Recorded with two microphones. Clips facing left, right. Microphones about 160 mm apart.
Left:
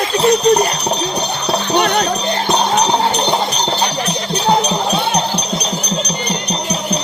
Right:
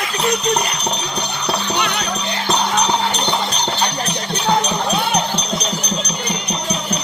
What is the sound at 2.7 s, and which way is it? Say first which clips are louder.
Music: left 4 dB; 30° left (ahead or behind).